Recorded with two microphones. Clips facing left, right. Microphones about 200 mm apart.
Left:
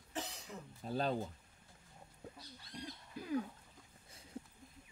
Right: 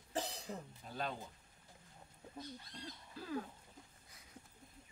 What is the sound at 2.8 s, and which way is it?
Owl, 15° left (ahead or behind).